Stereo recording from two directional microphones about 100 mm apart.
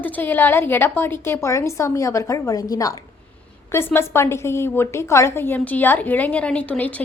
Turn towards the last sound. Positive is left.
turn(degrees=15)  # may be behind; listen again after turning